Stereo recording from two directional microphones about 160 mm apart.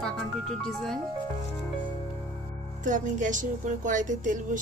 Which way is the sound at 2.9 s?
50° right (ahead or behind).